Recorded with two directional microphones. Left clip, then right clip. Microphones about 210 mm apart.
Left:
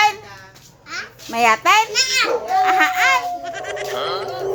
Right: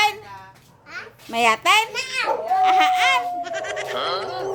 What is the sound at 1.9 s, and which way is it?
Speech, 15° right (ahead or behind).